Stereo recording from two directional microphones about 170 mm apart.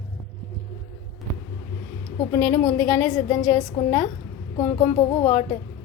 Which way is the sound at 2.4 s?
45° left (ahead or behind).